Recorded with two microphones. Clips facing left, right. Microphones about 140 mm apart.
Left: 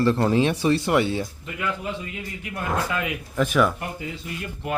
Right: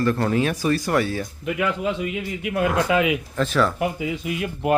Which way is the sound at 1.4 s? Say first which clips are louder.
Right 6 dB; 85° right.